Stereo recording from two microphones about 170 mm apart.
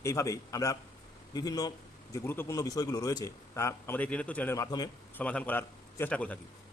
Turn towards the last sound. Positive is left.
turn(degrees=10)  # may be behind; listen again after turning